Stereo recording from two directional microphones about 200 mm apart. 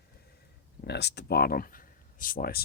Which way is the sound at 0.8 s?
55° left (ahead or behind).